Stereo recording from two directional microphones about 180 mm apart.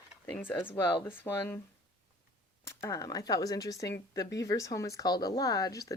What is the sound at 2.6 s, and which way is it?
Speech, 15° left (ahead or behind).